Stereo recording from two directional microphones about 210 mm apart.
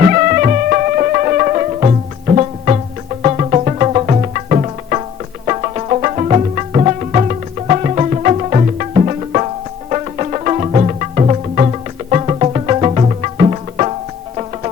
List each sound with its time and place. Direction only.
0.0 s music: 40° right (ahead or behind)